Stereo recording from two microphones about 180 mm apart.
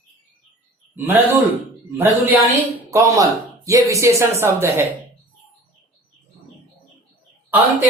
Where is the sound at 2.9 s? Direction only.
20° right (ahead or behind).